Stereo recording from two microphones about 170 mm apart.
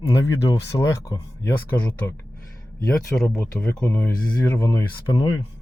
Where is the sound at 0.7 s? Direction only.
20° left (ahead or behind).